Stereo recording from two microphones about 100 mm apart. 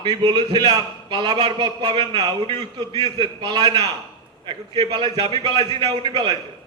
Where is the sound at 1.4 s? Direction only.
55° right (ahead or behind).